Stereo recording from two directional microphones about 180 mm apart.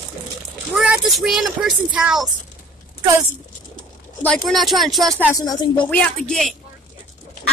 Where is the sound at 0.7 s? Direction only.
5° right (ahead or behind).